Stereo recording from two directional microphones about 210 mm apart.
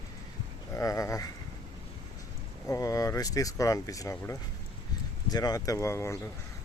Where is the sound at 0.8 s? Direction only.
15° left (ahead or behind).